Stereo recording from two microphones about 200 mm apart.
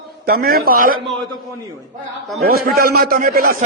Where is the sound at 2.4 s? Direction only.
50° right (ahead or behind).